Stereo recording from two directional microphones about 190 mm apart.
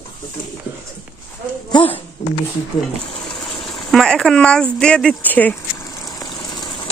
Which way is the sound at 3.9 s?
Centre (ahead or behind).